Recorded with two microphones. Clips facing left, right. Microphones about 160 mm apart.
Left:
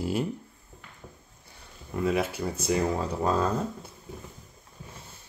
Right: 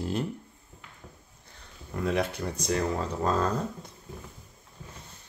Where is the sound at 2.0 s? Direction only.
5° left (ahead or behind).